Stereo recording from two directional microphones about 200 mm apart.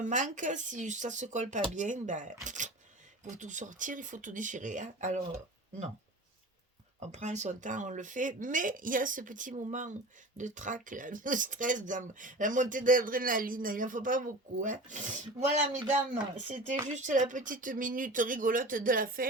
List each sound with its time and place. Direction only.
0.0 s speech: 40° right (ahead or behind)
7.1 s speech: 35° right (ahead or behind)
16.9 s speech: 40° right (ahead or behind)